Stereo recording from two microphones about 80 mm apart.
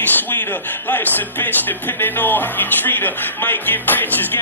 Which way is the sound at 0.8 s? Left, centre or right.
Left.